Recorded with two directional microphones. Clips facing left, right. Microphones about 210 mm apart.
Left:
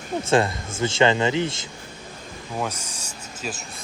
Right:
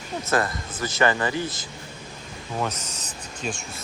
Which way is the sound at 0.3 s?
25° left (ahead or behind).